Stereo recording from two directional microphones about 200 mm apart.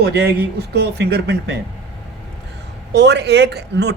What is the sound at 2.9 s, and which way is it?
Speech, 60° right (ahead or behind).